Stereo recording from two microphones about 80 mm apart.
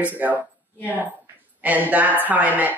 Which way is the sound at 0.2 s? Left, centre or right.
Centre.